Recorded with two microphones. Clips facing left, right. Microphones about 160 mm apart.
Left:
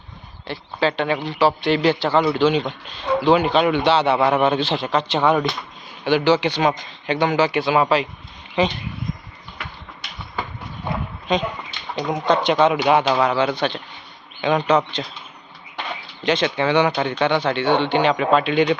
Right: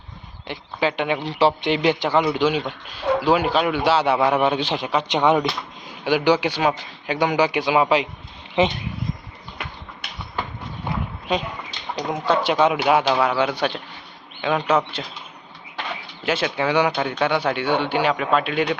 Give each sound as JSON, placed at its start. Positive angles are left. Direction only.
{"t": 0.4, "sound": "speech", "side_deg": -15}
{"t": 1.2, "sound": "a man's voice", "side_deg": -30}
{"t": 11.3, "sound": "a man's voice", "side_deg": -10}
{"t": 16.2, "sound": "speech", "side_deg": -5}